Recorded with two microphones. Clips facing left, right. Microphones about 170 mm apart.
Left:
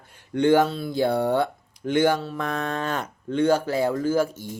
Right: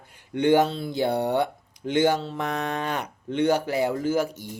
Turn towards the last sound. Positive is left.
turn(degrees=-15)  # may be behind; listen again after turning